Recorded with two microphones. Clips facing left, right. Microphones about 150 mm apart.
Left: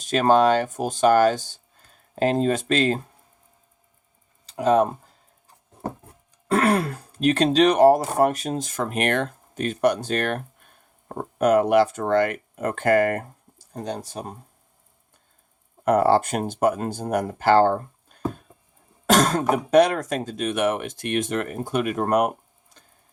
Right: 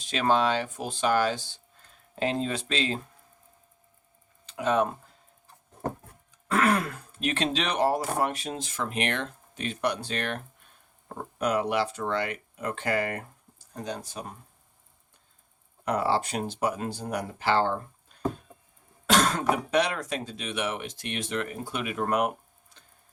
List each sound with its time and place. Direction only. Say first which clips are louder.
0.0 s speech: left 7 dB; 45° left (ahead or behind)
4.4 s speech: left 6 dB; 40° left (ahead or behind)
6.5 s speech: left 4 dB; 35° left (ahead or behind)
15.8 s speech: left 8 dB; 50° left (ahead or behind)